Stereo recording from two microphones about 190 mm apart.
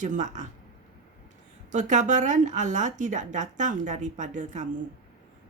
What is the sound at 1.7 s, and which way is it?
Speech, 40° right (ahead or behind).